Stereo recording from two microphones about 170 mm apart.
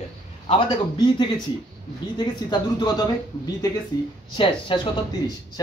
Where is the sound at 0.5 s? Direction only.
30° left (ahead or behind).